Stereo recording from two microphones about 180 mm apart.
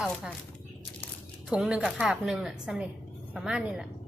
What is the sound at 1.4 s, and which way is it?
A woman's voice, 5° right (ahead or behind).